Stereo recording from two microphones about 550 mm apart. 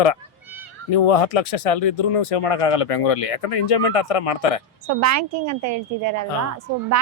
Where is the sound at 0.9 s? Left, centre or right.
Left.